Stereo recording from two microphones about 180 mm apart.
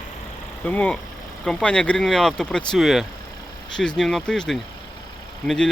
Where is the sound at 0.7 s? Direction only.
5° left (ahead or behind).